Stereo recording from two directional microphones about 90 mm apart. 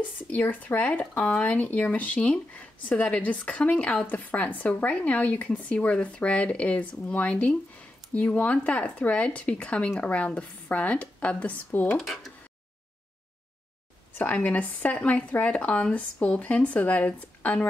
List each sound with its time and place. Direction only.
0.0 s speech: 20° left (ahead or behind)
11.9 s speech: centre (ahead or behind)
14.1 s speech: 20° left (ahead or behind)